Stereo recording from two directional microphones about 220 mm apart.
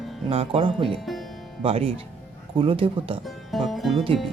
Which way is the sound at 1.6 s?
25° right (ahead or behind).